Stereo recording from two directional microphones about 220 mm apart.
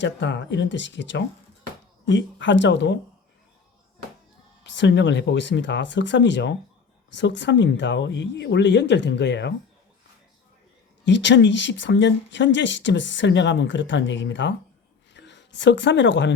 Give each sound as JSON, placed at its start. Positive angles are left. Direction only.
{"t": 0.0, "sound": "speech", "side_deg": 55}
{"t": 4.6, "sound": "speech", "side_deg": 55}
{"t": 11.0, "sound": "speech", "side_deg": 55}